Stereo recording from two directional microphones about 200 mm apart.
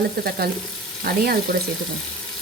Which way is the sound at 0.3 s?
50° right (ahead or behind).